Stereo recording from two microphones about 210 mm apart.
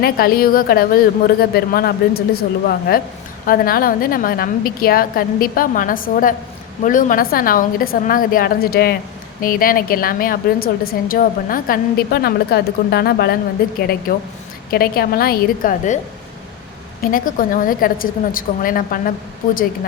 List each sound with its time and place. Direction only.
0.0 s a woman's voice: 45° left (ahead or behind)
17.0 s a woman's voice: 40° left (ahead or behind)